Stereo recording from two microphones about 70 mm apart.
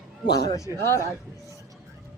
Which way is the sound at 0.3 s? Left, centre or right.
Left.